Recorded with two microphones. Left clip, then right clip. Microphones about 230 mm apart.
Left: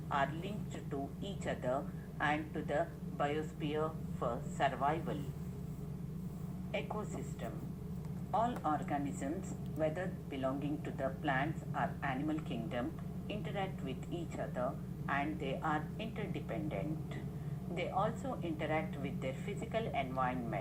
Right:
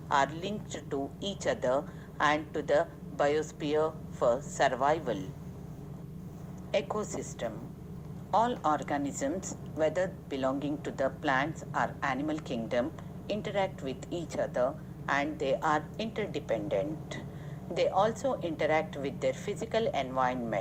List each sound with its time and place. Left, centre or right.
0.1 s a woman's voice: right
6.7 s a woman's voice: right